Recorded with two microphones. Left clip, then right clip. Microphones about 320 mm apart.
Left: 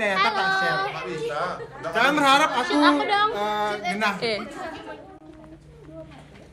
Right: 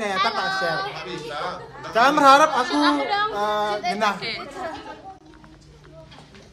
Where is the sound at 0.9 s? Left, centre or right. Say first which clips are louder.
Left 3 dB; centre.